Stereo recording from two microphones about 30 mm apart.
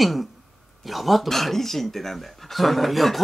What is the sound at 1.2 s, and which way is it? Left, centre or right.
Speech, centre.